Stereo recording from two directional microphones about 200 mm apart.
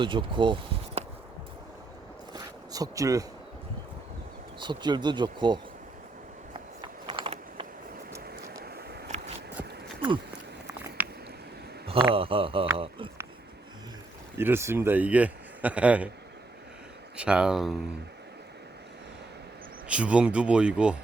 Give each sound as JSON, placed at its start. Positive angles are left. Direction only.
{"t": 0.0, "sound": "speech", "side_deg": -25}
{"t": 2.3, "sound": "a sound", "side_deg": -20}
{"t": 4.6, "sound": "speech", "side_deg": -20}
{"t": 6.5, "sound": "mechanisms", "side_deg": -25}
{"t": 8.2, "sound": "vehicle", "side_deg": -50}
{"t": 9.0, "sound": "a sound", "side_deg": -35}
{"t": 10.7, "sound": "biting", "side_deg": -10}
{"t": 11.9, "sound": "speech", "side_deg": -25}
{"t": 12.7, "sound": "a sound", "side_deg": -25}
{"t": 14.3, "sound": "a man's voice", "side_deg": -10}
{"t": 17.2, "sound": "speech", "side_deg": -5}
{"t": 19.9, "sound": "speech", "side_deg": -5}